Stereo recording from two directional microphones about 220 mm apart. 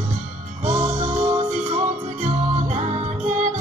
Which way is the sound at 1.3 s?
30° right (ahead or behind).